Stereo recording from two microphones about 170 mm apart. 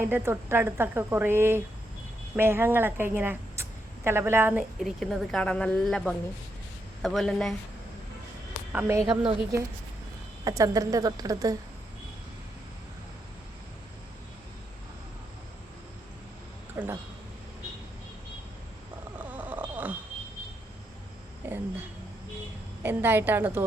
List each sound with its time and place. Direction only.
0.1 s speech: 15° right (ahead or behind)
4.8 s speech: centre (ahead or behind)
8.7 s speech: 15° right (ahead or behind)
10.4 s a woman's voice: 20° right (ahead or behind)
16.7 s speech: 15° right (ahead or behind)
19.2 s a sound: 10° right (ahead or behind)
21.4 s a sound: 10° right (ahead or behind)
22.8 s a woman's voice: 15° right (ahead or behind)